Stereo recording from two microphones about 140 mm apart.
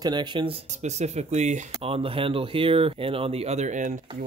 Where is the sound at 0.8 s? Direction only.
55° right (ahead or behind).